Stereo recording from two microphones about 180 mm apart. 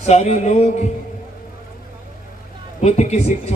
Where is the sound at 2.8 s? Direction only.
40° left (ahead or behind).